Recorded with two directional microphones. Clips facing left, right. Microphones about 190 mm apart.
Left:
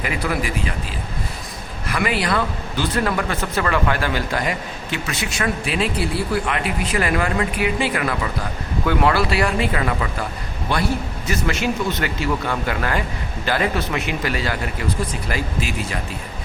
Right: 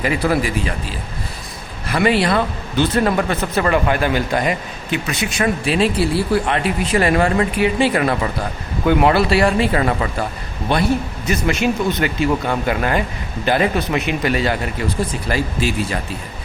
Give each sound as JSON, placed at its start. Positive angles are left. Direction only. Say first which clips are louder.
{"t": 0.0, "sound": "speech", "louder": "right 5 dB", "side_deg": -30}
{"t": 1.9, "sound": "speech", "louder": "right 5 dB", "side_deg": -30}
{"t": 5.6, "sound": "speech", "louder": "right 5 dB", "side_deg": -30}
{"t": 8.9, "sound": "speech", "louder": "right 5 dB", "side_deg": -20}
{"t": 11.3, "sound": "speech", "louder": "right 4 dB", "side_deg": -20}